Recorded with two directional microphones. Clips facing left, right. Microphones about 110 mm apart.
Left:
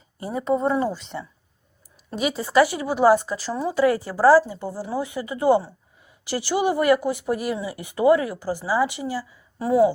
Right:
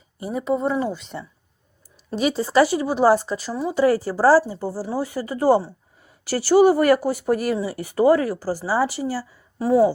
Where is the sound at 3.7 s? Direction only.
30° right (ahead or behind).